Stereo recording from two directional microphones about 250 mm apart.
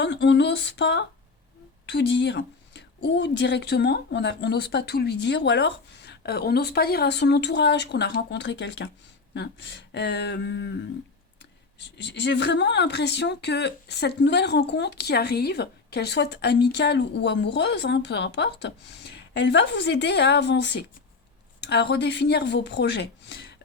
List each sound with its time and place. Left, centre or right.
0.0 s speech: left
12.0 s speech: left